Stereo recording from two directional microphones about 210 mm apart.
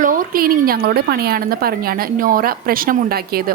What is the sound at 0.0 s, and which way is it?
A woman's voice, 40° right (ahead or behind).